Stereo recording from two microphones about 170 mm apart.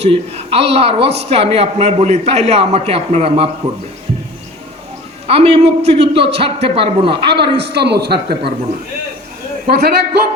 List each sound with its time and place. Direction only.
0.0 s a man's voice: 35° right (ahead or behind)
5.3 s a man's voice: 35° right (ahead or behind)
7.6 s a man's voice: 75° right (ahead or behind)
8.3 s a man's voice: 30° right (ahead or behind)
9.6 s a woman's voice: 65° right (ahead or behind)